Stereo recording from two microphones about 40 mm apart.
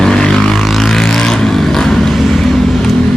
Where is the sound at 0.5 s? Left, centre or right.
Centre.